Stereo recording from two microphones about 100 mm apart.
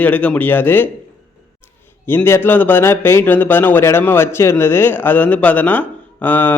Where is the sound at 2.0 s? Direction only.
20° left (ahead or behind).